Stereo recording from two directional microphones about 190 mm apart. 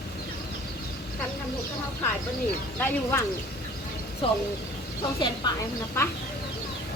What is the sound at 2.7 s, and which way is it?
Speech, 10° left (ahead or behind).